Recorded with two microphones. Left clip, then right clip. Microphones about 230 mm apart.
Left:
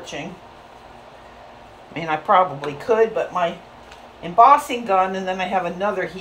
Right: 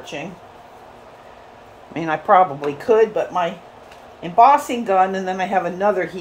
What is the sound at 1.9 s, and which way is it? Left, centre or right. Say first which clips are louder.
Speech: right 2 dB; right.